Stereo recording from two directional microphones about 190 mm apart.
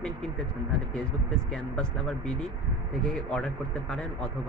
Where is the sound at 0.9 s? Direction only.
5° left (ahead or behind).